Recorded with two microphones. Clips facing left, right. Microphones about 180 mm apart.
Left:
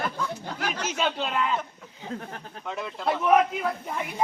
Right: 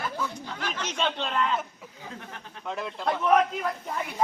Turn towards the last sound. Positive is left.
turn(degrees=0)  # may be behind; listen again after turning